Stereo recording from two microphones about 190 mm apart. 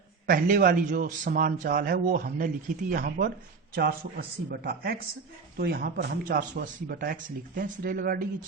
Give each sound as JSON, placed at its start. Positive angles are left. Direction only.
{"t": 0.3, "sound": "a man's voice", "side_deg": -45}